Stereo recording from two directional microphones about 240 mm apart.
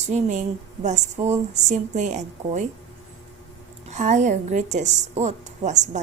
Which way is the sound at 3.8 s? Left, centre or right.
Right.